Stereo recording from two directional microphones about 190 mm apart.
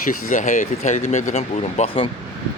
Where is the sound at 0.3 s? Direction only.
45° left (ahead or behind).